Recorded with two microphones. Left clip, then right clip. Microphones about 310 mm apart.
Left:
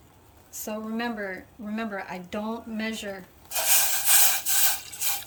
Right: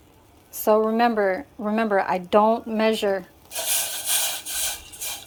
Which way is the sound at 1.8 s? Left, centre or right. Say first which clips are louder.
Right 12 dB; centre.